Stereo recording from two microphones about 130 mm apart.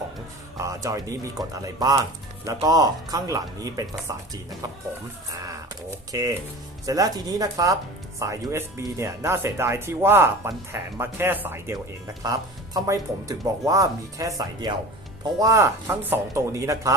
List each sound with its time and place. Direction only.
0.5 s speech: 25° right (ahead or behind)
5.9 s speech: 25° right (ahead or behind)